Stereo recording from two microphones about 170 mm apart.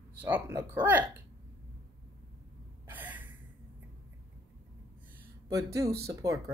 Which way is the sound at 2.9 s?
10° right (ahead or behind).